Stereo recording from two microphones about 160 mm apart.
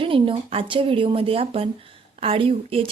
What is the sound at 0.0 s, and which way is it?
Speech, 35° right (ahead or behind).